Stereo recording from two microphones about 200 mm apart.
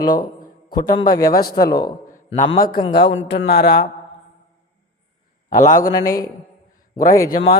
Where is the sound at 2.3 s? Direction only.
35° left (ahead or behind).